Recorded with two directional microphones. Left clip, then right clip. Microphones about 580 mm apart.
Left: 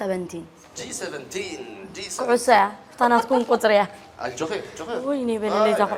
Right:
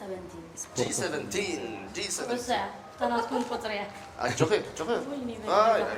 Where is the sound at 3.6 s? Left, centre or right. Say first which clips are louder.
Left 16 dB; left.